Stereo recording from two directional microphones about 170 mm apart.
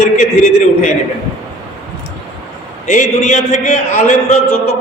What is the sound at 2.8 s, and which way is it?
A man's voice, 45° left (ahead or behind).